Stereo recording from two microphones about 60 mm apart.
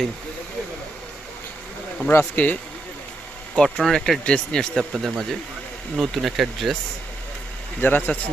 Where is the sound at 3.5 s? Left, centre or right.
Centre.